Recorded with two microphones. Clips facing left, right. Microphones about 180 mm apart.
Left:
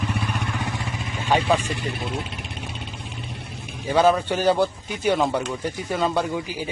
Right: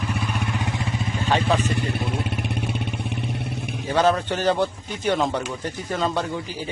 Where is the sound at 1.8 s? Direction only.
60° right (ahead or behind).